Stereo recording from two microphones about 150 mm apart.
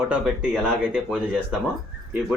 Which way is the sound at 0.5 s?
5° left (ahead or behind).